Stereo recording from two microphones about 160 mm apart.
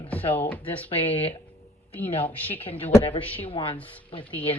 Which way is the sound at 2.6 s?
35° left (ahead or behind).